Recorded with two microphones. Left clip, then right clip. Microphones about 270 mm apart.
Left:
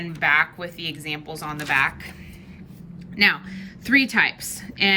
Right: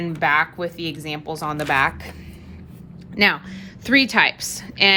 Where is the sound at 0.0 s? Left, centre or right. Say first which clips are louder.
Right 1 dB; centre.